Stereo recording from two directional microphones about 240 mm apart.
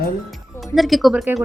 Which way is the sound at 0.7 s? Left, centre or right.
Centre.